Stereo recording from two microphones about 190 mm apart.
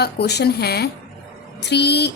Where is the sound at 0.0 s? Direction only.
60° left (ahead or behind).